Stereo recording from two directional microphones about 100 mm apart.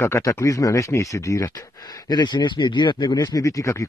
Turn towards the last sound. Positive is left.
turn(degrees=30)  # may be behind; listen again after turning